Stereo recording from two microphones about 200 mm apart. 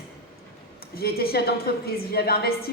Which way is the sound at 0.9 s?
50° left (ahead or behind).